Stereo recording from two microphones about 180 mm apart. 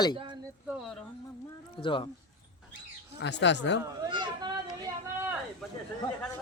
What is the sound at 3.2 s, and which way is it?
Speech, 75° left (ahead or behind).